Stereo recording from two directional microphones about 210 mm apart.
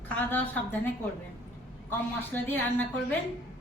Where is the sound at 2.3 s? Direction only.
5° left (ahead or behind).